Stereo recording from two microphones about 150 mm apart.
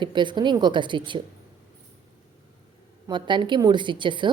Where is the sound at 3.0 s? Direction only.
30° right (ahead or behind).